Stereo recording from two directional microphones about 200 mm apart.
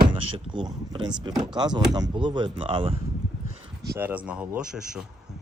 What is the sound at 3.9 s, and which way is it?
Speech, 10° right (ahead or behind).